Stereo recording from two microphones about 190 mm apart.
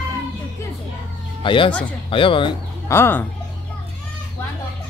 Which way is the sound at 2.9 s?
10° left (ahead or behind).